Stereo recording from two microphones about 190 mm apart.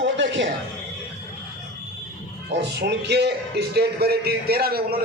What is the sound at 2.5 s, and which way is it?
A man's voice, 65° right (ahead or behind).